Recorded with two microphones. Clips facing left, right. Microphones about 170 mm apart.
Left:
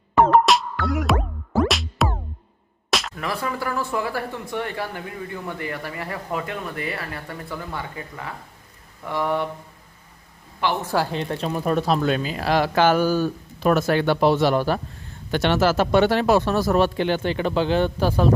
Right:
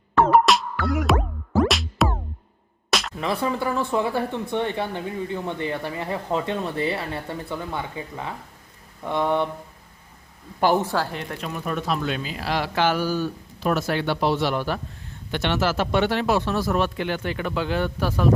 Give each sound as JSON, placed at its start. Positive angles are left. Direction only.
{"t": 0.3, "sound": "music", "side_deg": 0}
{"t": 2.9, "sound": "a sound", "side_deg": 0}
{"t": 3.2, "sound": "speech", "side_deg": -20}
{"t": 10.6, "sound": "speech", "side_deg": -45}
{"t": 10.9, "sound": "speech", "side_deg": 15}
{"t": 11.2, "sound": "speech", "side_deg": 30}